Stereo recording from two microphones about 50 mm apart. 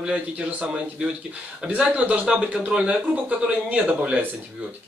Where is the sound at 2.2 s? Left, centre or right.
Centre; by 4.2 s right.